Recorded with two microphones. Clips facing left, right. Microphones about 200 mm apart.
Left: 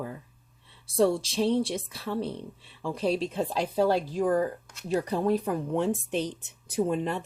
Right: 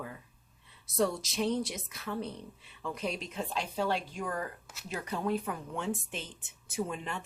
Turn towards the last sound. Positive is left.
turn(degrees=35)  # may be behind; listen again after turning